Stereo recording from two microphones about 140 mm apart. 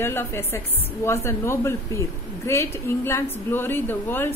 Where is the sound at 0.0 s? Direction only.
15° left (ahead or behind).